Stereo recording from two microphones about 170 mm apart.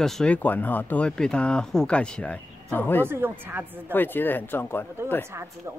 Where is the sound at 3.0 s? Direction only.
15° right (ahead or behind).